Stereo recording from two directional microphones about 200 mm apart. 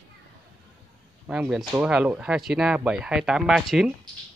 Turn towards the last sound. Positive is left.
turn(degrees=0)  # may be behind; listen again after turning